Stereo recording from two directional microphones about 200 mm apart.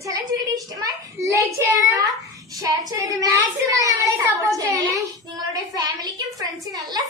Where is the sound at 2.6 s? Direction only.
15° right (ahead or behind).